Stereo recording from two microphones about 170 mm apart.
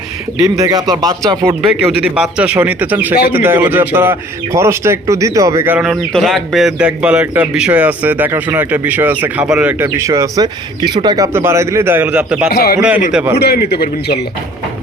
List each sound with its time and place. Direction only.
0.5 s speech: 20° right (ahead or behind)
1.6 s speech: 10° right (ahead or behind)
5.8 s speech: centre (ahead or behind); by 11.3 s 25° right (ahead or behind)
11.3 s speech: 15° right (ahead or behind)
12.5 s a man's voice: 65° left (ahead or behind)
13.1 s a man's voice: 5° right (ahead or behind)
13.3 s a man's voice: 70° left (ahead or behind)